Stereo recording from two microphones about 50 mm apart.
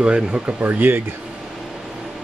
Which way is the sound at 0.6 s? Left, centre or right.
Right.